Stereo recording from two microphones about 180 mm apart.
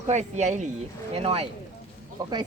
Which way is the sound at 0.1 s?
40° right (ahead or behind).